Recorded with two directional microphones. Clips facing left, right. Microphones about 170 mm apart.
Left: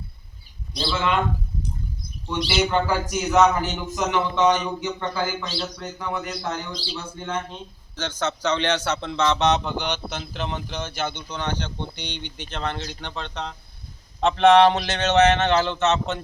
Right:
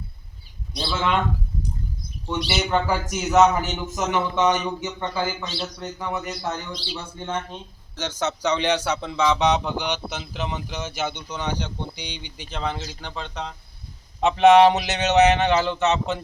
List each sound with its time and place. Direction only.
0.7 s a man's voice: 5° right (ahead or behind)
2.5 s a man's voice: 10° right (ahead or behind)
6.1 s a man's voice: 5° right (ahead or behind)
7.9 s a man's voice: 15° right (ahead or behind)
15.4 s speech: 5° right (ahead or behind)